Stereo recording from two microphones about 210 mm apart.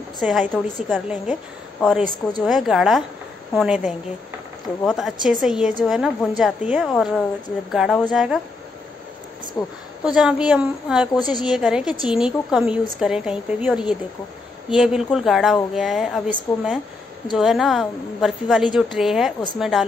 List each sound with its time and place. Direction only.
0.2 s a woman's voice: centre (ahead or behind)
9.6 s a woman's voice: 15° left (ahead or behind)
10.0 s a woman's voice: 5° right (ahead or behind)
11.1 s a woman's voice: 20° left (ahead or behind)
11.4 s a woman's voice: 5° right (ahead or behind)